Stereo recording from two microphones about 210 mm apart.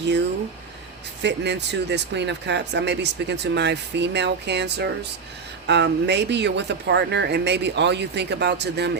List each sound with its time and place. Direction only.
1.2 s speech: 55° right (ahead or behind)